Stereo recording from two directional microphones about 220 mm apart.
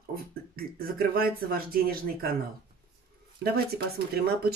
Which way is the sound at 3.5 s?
45° right (ahead or behind).